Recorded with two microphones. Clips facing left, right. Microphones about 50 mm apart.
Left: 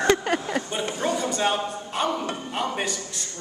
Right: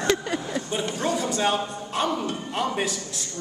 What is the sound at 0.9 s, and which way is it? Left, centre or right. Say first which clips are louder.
A man's voice: left 1 dB; centre.